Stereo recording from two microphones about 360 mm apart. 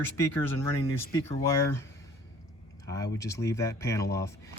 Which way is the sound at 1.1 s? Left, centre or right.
Centre.